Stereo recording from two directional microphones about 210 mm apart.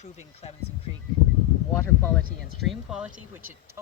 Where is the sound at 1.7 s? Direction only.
10° left (ahead or behind).